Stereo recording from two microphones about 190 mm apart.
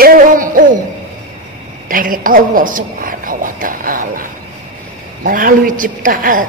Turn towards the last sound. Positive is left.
turn(degrees=-45)  # may be behind; listen again after turning